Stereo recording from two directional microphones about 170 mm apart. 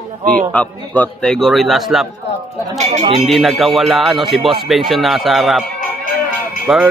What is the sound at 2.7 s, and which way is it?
Speech, 40° right (ahead or behind).